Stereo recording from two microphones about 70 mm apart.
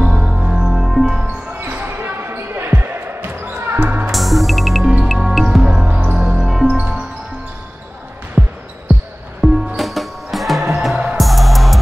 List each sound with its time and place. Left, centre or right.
0.0 s music: centre
1.2 s basketball bounce: right
3.8 s music: centre
4.1 s music: centre
5.9 s music: centre
6.2 s music: centre
8.4 s basketball bounce: centre
9.4 s music: centre